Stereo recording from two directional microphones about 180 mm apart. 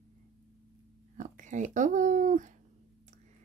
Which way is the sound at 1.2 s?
45° right (ahead or behind).